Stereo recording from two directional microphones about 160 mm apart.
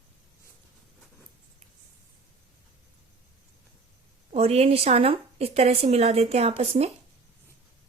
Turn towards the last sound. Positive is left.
turn(degrees=-40)  # may be behind; listen again after turning